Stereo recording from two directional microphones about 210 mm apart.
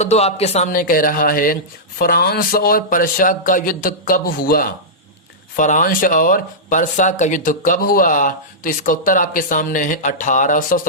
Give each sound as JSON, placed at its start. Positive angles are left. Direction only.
{"t": 0.0, "sound": "speech", "side_deg": 30}